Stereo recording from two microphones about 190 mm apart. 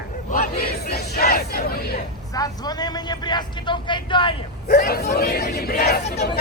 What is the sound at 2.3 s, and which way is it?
Speech, 20° left (ahead or behind).